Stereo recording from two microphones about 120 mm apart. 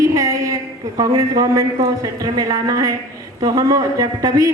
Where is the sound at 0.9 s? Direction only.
30° right (ahead or behind).